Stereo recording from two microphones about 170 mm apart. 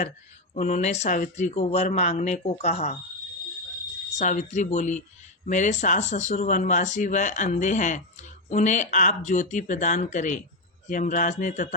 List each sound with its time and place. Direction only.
0.5 s speech: 40° left (ahead or behind)
4.2 s speech: 45° left (ahead or behind)